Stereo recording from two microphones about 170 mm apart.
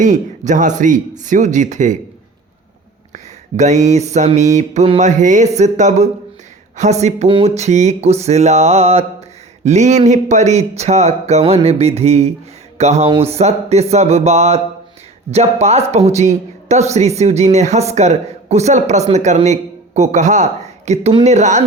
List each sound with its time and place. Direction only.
0.0 s speech: 45° right (ahead or behind)
3.6 s speech: 40° right (ahead or behind)